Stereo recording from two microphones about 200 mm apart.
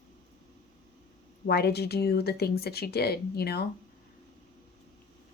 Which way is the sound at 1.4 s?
50° left (ahead or behind).